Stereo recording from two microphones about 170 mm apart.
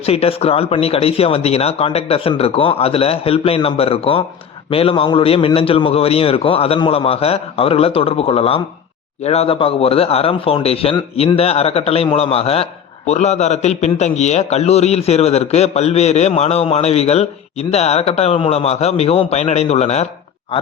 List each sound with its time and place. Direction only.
0.0 s a man's voice: 35° left (ahead or behind)